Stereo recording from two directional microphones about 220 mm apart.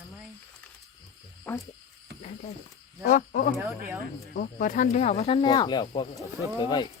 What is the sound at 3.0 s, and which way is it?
Speech, 40° left (ahead or behind).